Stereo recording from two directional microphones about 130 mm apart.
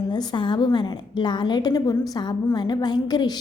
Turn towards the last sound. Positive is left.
turn(degrees=35)  # may be behind; listen again after turning